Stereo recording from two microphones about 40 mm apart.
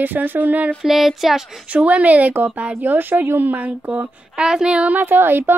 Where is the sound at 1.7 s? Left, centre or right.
Right.